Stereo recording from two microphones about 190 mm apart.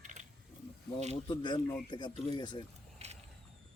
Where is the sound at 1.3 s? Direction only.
25° left (ahead or behind).